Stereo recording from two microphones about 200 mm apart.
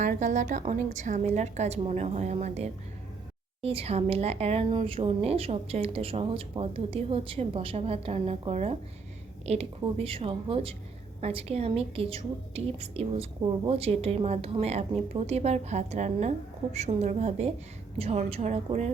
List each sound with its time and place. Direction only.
0.0 s a woman's voice: 40° right (ahead or behind)